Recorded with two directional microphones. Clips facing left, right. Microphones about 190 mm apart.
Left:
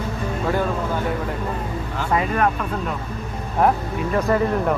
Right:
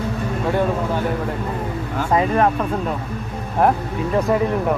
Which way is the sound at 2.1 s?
25° right (ahead or behind).